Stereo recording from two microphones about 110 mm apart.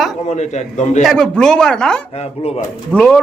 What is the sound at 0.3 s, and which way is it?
Speech, 90° left.